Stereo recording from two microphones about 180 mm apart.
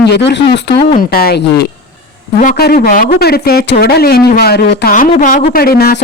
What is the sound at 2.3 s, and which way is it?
Speech, 50° left (ahead or behind).